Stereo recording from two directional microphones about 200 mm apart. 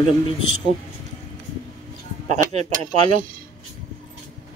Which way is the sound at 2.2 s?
35° right (ahead or behind).